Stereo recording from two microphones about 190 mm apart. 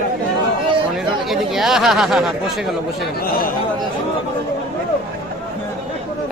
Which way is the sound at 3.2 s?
50° left (ahead or behind).